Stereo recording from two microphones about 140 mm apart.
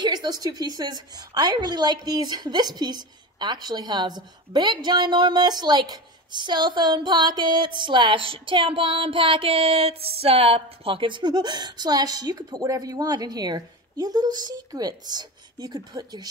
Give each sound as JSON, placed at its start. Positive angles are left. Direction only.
{"t": 0.0, "sound": "a woman's voice", "side_deg": -30}